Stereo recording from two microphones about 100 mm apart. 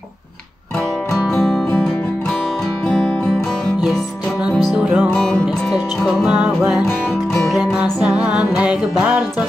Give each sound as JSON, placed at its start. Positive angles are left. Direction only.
{"t": 1.3, "sound": "music", "side_deg": 5}
{"t": 4.7, "sound": "music", "side_deg": -10}